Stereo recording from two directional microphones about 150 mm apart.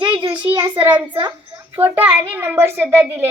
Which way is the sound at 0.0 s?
35° right (ahead or behind).